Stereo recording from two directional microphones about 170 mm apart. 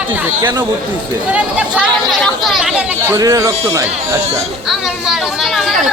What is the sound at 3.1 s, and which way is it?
Speech, 20° right (ahead or behind).